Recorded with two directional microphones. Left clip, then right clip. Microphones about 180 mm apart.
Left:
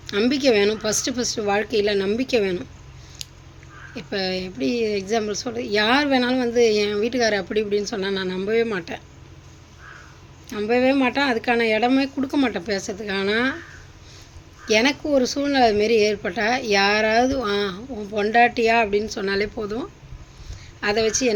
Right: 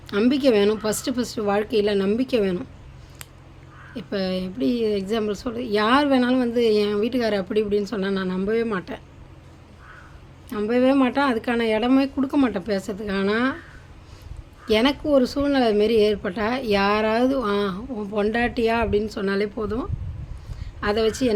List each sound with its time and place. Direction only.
0.1 s speech: 20° right (ahead or behind)
3.9 s speech: 20° right (ahead or behind)
10.5 s speech: 20° right (ahead or behind)
14.7 s speech: 20° right (ahead or behind)